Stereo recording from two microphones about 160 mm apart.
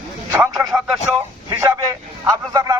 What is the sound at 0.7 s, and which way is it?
Speech, centre (ahead or behind).